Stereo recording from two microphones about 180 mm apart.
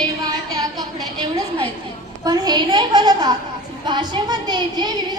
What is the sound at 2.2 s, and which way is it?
A woman's voice, 20° right (ahead or behind).